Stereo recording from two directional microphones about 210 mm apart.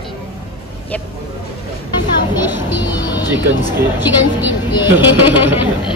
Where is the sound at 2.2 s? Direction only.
20° left (ahead or behind).